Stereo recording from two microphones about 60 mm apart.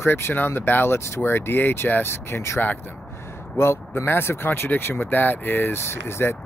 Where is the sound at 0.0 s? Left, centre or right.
Left.